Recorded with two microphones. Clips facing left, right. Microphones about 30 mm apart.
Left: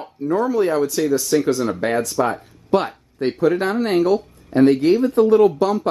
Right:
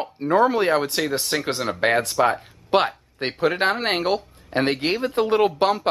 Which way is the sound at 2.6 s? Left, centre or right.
Right.